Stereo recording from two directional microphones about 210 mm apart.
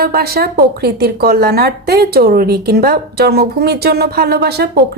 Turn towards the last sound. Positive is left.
turn(degrees=-50)  # may be behind; listen again after turning